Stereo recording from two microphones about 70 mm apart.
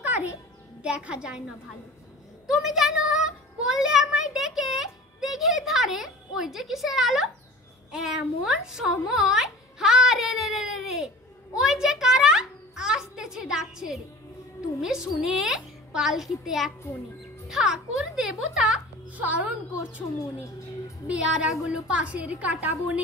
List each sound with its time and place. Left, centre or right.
0.0 s music: right
0.8 s a child's voice: centre
2.4 s a woman's voice: centre
19.1 s a child's voice: right